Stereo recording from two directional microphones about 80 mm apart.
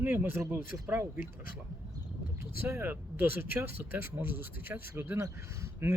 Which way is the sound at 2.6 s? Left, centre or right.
Right.